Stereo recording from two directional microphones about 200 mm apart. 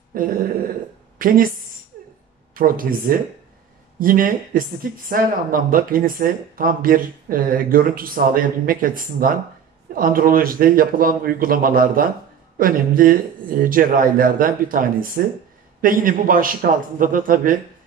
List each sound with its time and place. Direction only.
0.1 s a sound: 45° right (ahead or behind)
1.1 s a woman's voice: 45° right (ahead or behind)
2.5 s speech: 45° right (ahead or behind)